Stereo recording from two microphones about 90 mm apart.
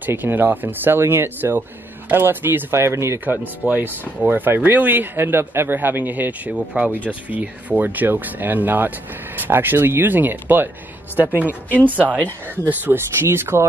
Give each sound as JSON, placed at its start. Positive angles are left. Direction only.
{"t": 0.0, "sound": "speech", "side_deg": -20}
{"t": 3.6, "sound": "speech", "side_deg": -20}
{"t": 6.5, "sound": "speech", "side_deg": -5}
{"t": 7.1, "sound": "speech", "side_deg": -15}